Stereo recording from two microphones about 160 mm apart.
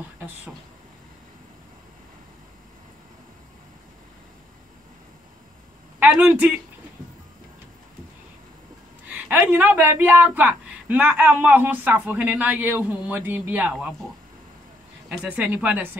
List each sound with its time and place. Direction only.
5.9 s speech: 10° right (ahead or behind)
9.1 s a woman's voice: 10° right (ahead or behind)
15.0 s a woman's voice: 10° right (ahead or behind)